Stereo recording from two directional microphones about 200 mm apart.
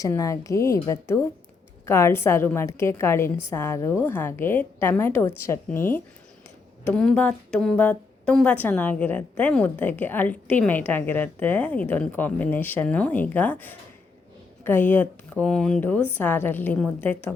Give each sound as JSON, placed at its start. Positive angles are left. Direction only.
{"t": 0.0, "sound": "a woman's voice", "side_deg": 15}